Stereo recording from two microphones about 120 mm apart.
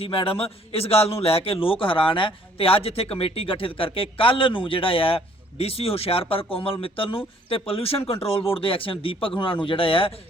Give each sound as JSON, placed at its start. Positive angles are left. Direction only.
{"t": 0.0, "sound": "a man's voice", "side_deg": 50}